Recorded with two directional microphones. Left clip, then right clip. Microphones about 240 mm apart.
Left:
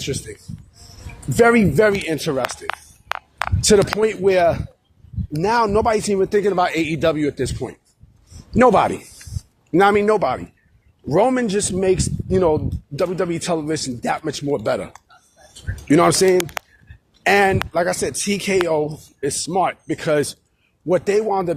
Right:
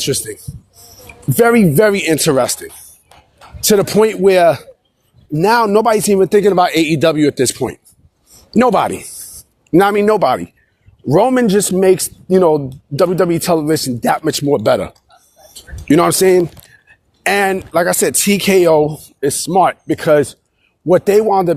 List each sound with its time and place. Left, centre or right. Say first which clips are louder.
0.0 s speech: right 8 dB; right